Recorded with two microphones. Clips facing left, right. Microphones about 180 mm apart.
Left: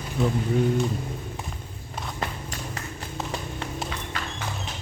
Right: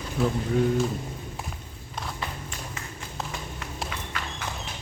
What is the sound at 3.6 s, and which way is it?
Horse, 30° left (ahead or behind).